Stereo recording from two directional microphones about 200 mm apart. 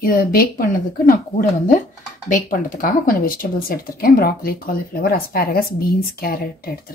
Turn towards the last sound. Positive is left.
turn(degrees=50)  # may be behind; listen again after turning